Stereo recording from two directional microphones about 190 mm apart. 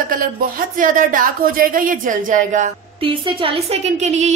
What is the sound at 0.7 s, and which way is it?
Speech, 45° right (ahead or behind).